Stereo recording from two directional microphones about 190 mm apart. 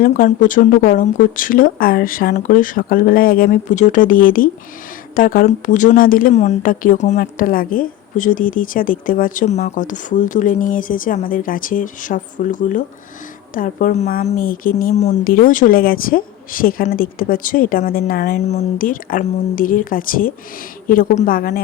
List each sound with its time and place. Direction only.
0.0 s speech: 45° left (ahead or behind)